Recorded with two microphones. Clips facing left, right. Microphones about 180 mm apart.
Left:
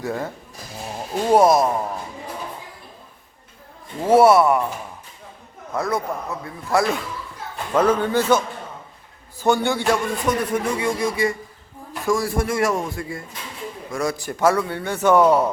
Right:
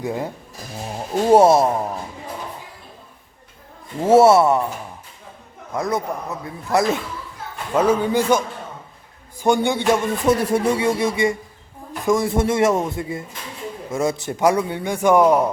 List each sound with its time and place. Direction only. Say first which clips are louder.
0.0 s a man's voice: right 1 dB; 15° right (ahead or behind)
1.3 s speech: right 2 dB; 25° right (ahead or behind)
4.0 s speech: right 1 dB; 25° right (ahead or behind)
5.7 s speech: right 1 dB; 20° right (ahead or behind)
7.7 s a man's voice: right 1 dB; 10° right (ahead or behind)
9.4 s a man's voice: right 1 dB; 15° right (ahead or behind)